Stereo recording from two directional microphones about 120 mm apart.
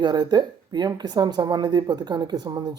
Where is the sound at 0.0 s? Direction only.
35° right (ahead or behind).